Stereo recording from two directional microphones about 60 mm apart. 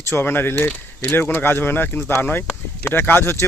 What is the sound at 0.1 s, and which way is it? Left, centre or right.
Speech, left.